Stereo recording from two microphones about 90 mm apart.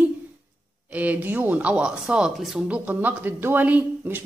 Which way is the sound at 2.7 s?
20° right (ahead or behind).